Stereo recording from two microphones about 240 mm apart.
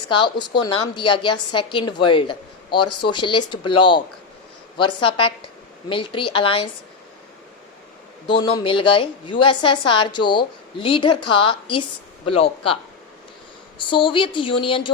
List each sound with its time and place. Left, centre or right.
0.1 s a woman's voice: centre
8.3 s a woman's voice: centre